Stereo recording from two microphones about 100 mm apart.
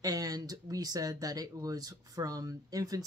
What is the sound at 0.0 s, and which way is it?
Speech, 40° right (ahead or behind).